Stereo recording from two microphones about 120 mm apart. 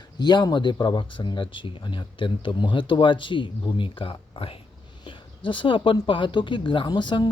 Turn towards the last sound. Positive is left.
turn(degrees=40)  # may be behind; listen again after turning